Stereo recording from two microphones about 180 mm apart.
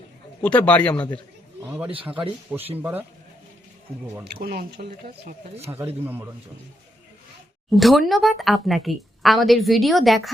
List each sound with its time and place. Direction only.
0.4 s a man's voice: 5° left (ahead or behind)
1.6 s a sound: 5° right (ahead or behind)
1.9 s a man's voice: 30° right (ahead or behind)
2.5 s speech: 10° right (ahead or behind)
4.2 s speech: 60° right (ahead or behind)
5.7 s speech: 10° right (ahead or behind)
7.8 s a woman's voice: centre (ahead or behind)